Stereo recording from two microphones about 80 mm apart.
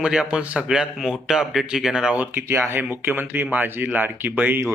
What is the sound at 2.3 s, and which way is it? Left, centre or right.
Speech, right.